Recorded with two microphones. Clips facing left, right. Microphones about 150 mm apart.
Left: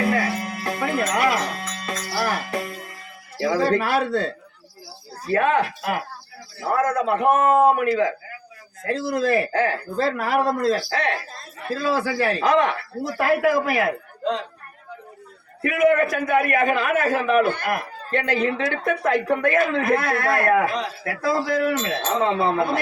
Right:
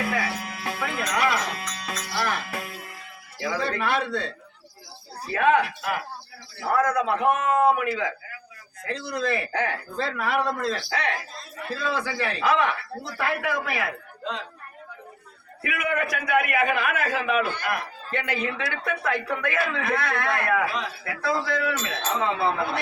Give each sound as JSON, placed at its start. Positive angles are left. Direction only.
{"t": 0.8, "sound": "a man's voice", "side_deg": 40}
{"t": 2.0, "sound": "music", "side_deg": 40}
{"t": 3.3, "sound": "a man's voice", "side_deg": 35}
{"t": 5.3, "sound": "a man's voice", "side_deg": 40}
{"t": 7.1, "sound": "speech", "side_deg": 50}
{"t": 7.5, "sound": "a man's voice", "side_deg": 40}
{"t": 15.6, "sound": "a man's voice", "side_deg": 40}